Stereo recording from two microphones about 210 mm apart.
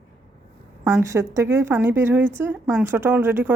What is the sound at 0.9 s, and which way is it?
A woman's voice, 15° right (ahead or behind).